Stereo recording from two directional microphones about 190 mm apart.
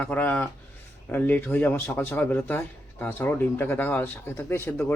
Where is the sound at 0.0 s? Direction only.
10° left (ahead or behind).